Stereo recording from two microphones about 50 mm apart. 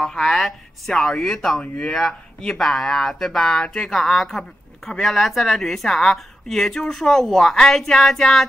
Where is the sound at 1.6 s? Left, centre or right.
Centre.